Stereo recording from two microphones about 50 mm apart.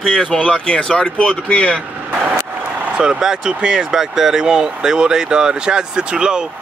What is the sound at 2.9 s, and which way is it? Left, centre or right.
Speech, centre.